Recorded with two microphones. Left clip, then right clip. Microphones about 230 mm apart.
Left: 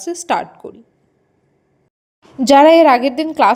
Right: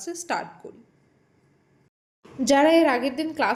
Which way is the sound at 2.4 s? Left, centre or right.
Left.